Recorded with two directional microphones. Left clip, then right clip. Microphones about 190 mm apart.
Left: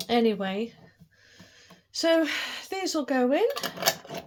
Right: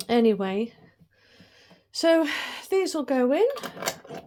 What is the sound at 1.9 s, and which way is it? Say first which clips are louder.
Speech: right 2 dB; 55° right (ahead or behind).